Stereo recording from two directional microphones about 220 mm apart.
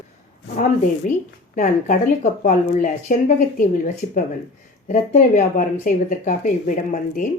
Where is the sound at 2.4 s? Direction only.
35° left (ahead or behind).